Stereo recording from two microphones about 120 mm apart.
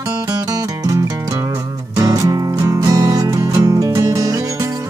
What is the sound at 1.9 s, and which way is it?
Music, 30° right (ahead or behind).